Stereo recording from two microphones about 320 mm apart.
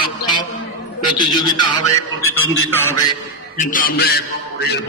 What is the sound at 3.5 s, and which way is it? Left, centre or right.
A man's voice, left.